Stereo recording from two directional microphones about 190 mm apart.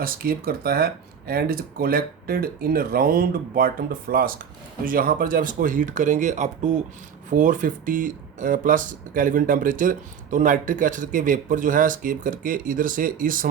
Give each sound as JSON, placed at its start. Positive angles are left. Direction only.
{"t": 0.0, "sound": "speech", "side_deg": -50}